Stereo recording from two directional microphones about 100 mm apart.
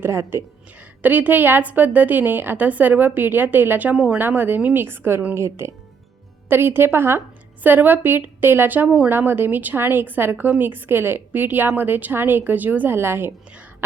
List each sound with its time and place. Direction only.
0.0 s a woman's voice: 25° right (ahead or behind)
1.0 s a woman's voice: 15° right (ahead or behind)